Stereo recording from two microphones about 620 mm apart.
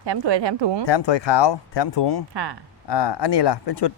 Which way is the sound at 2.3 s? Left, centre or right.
Right.